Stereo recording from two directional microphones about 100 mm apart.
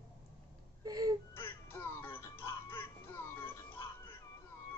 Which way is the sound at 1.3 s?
25° left (ahead or behind).